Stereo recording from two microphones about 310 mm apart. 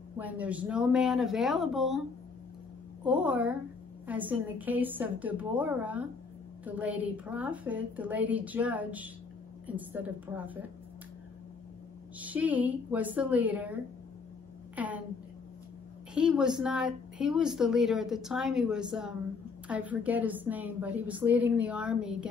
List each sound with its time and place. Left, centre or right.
0.2 s speech: centre
12.2 s speech: centre
14.8 s speech: centre
16.2 s speech: centre